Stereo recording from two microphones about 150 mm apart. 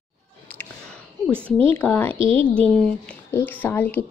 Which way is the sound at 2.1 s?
35° right (ahead or behind).